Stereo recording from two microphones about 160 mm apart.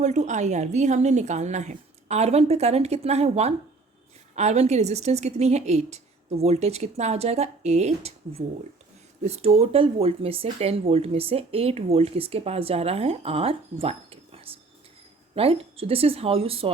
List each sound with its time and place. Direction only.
0.0 s a woman's voice: 45° right (ahead or behind)